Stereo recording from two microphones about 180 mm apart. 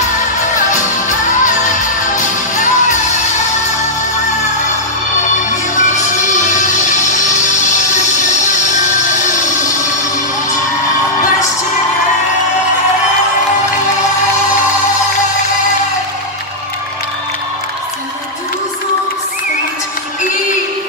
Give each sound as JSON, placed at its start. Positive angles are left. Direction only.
{"t": 0.0, "sound": "music", "side_deg": 45}
{"t": 5.2, "sound": "music", "side_deg": 45}
{"t": 8.5, "sound": "a sound", "side_deg": 45}